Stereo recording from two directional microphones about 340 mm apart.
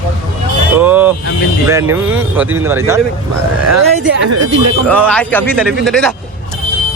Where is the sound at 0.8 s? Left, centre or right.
Centre.